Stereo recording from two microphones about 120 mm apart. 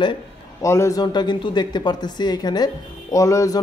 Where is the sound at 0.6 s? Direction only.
25° left (ahead or behind).